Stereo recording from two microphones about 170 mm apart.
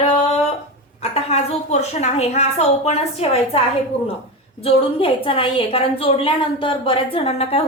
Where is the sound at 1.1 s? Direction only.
40° left (ahead or behind).